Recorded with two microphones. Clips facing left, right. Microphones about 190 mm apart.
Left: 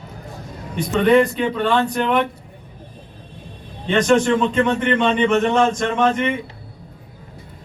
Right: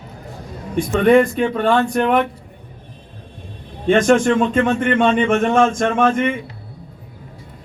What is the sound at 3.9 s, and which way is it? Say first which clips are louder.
A man's voice: right 2 dB; 50° right (ahead or behind).